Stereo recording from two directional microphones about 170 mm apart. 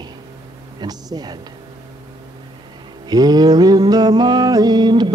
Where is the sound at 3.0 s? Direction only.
25° right (ahead or behind).